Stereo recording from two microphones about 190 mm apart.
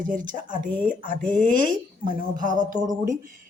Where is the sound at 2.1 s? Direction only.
45° right (ahead or behind).